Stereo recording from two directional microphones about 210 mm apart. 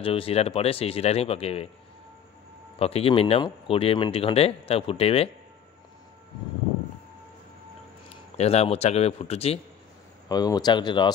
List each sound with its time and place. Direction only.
0.0 s speech: 25° left (ahead or behind)
2.8 s speech: 30° left (ahead or behind)
8.4 s speech: 30° left (ahead or behind)
10.2 s speech: 20° left (ahead or behind)